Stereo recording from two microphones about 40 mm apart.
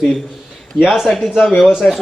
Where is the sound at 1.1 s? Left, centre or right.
Centre.